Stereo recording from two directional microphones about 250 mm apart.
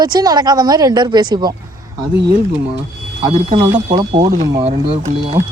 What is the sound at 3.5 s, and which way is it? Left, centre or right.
Speech, centre.